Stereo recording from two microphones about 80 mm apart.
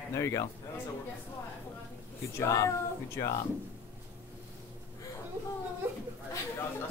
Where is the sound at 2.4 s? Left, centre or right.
Left.